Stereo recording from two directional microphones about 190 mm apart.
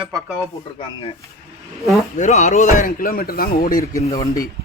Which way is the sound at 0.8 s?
30° left (ahead or behind).